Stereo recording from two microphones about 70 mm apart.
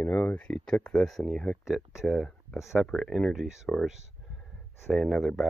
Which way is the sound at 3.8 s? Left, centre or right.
Centre.